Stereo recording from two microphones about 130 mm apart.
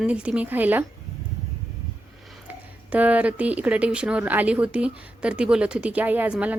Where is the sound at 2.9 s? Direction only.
10° right (ahead or behind).